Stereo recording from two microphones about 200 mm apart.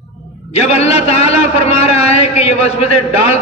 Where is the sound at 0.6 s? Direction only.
30° left (ahead or behind).